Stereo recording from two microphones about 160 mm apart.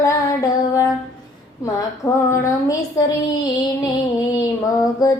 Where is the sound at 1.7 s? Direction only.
20° left (ahead or behind).